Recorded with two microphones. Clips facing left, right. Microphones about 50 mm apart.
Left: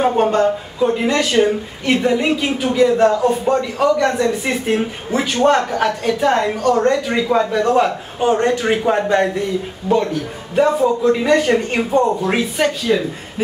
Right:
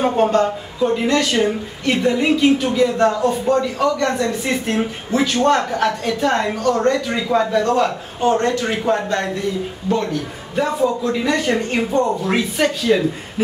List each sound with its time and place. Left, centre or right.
0.0 s a woman's voice: centre
10.8 s a woman's voice: centre